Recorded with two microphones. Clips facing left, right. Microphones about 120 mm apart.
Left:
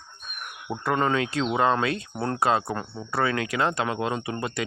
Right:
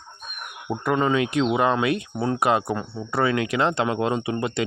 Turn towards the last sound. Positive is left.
turn(degrees=-20)  # may be behind; listen again after turning